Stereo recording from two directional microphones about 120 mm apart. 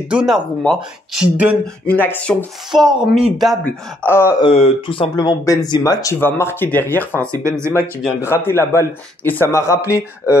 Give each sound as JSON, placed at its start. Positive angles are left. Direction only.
{"t": 0.1, "sound": "speech", "side_deg": -10}
{"t": 1.9, "sound": "speech", "side_deg": 15}
{"t": 2.9, "sound": "speech", "side_deg": -5}
{"t": 3.6, "sound": "speech", "side_deg": 20}
{"t": 4.4, "sound": "speech", "side_deg": 55}
{"t": 5.2, "sound": "speech", "side_deg": 30}
{"t": 6.1, "sound": "speech", "side_deg": 20}
{"t": 7.4, "sound": "speech", "side_deg": -25}
{"t": 8.5, "sound": "speech", "side_deg": 20}